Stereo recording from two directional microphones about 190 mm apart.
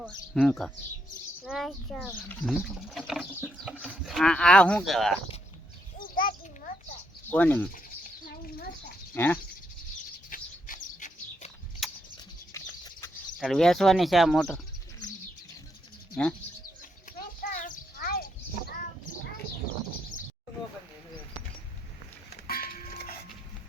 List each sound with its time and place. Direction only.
0.0 s speech: centre (ahead or behind)
6.0 s a sound: 45° left (ahead or behind)
7.3 s speech: 10° left (ahead or behind)
7.7 s bird: 50° left (ahead or behind)
9.1 s speech: 10° left (ahead or behind)
10.2 s bird: 45° left (ahead or behind)
11.8 s a sound: centre (ahead or behind)
12.5 s chicken: 15° left (ahead or behind)
13.4 s speech: centre (ahead or behind)
16.2 s speech: 5° left (ahead or behind)
17.2 s horse: 45° left (ahead or behind)
22.3 s a sound: 50° left (ahead or behind)